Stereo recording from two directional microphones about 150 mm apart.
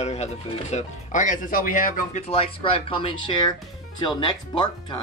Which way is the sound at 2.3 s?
40° left (ahead or behind).